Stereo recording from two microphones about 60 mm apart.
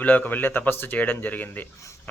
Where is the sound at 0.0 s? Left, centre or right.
Left.